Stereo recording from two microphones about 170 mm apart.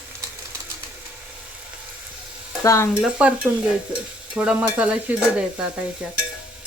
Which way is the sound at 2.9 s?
5° right (ahead or behind).